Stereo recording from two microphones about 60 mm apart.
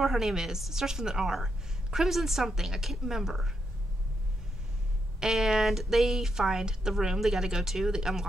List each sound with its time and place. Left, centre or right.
0.0 s a woman's voice: centre
5.2 s a woman's voice: centre